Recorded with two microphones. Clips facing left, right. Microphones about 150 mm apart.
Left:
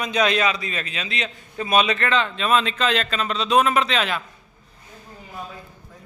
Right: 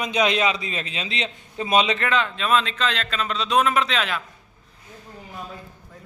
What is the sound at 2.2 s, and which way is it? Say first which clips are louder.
A man's voice: left 1 dB; centre (ahead or behind).